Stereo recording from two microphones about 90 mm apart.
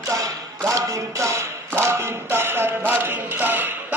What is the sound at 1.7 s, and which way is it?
Music, 30° right (ahead or behind).